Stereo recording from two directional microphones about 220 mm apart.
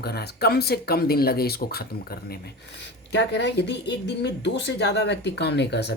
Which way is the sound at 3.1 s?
50° left (ahead or behind).